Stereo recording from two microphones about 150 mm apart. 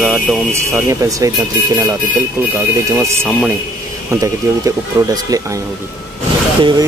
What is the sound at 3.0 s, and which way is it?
Speech, 15° right (ahead or behind).